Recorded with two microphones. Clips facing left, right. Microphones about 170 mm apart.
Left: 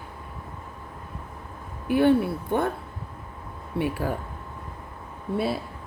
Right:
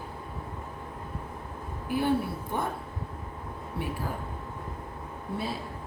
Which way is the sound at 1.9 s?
70° left (ahead or behind).